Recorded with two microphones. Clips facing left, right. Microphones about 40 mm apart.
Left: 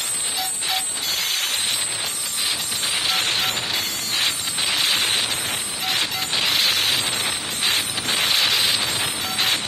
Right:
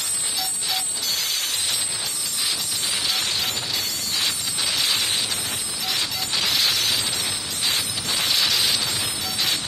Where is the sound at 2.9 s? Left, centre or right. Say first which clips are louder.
Left 4 dB; left.